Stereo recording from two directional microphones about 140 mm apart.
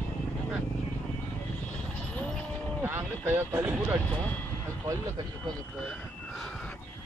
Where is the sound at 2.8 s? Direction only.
15° right (ahead or behind).